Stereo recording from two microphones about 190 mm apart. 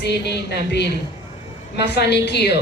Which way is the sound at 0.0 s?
60° left (ahead or behind).